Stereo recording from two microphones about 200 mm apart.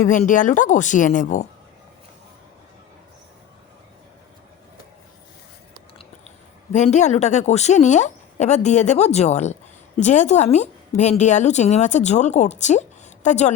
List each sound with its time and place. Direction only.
0.0 s speech: 40° left (ahead or behind)
6.7 s speech: 35° left (ahead or behind)